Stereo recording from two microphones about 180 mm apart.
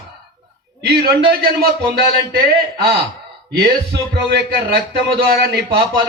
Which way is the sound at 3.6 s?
65° right (ahead or behind).